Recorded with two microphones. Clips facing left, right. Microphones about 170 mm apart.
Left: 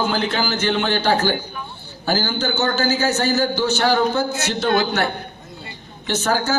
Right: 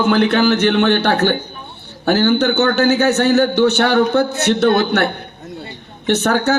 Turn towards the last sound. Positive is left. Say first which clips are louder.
# right 5 dB
turn(degrees=-65)  # may be behind; listen again after turning